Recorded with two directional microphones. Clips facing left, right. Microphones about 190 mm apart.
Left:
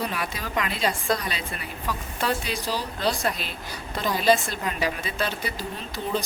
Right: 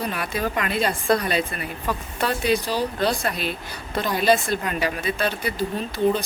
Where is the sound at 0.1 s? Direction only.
55° right (ahead or behind).